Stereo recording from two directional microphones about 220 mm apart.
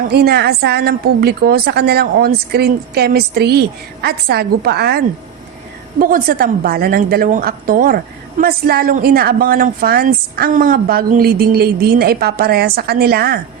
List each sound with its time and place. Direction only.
0.0 s a woman's voice: 45° right (ahead or behind)